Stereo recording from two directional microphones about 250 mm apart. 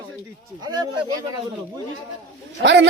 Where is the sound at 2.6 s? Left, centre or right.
Right.